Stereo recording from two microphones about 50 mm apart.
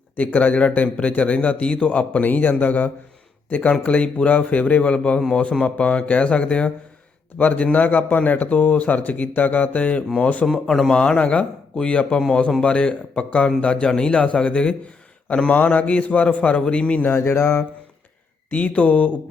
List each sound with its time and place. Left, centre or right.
0.2 s a man's voice: left
7.3 s a man's voice: left
10.4 s speech: centre
11.0 s a man's voice: left
15.4 s a man's voice: left
17.2 s mantra: left
18.5 s a man's voice: left